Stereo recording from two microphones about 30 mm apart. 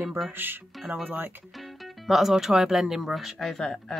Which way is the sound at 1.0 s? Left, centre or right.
Right.